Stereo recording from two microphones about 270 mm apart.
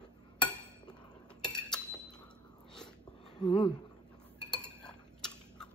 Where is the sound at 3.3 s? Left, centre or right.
Centre.